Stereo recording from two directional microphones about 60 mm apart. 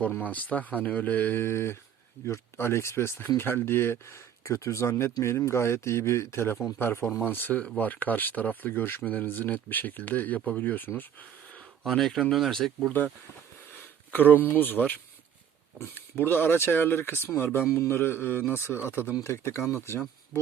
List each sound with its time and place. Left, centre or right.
0.2 s speech: left
11.8 s speech: centre
13.7 s speech: left